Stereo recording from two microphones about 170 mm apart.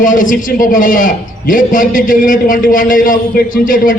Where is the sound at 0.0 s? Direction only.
50° left (ahead or behind).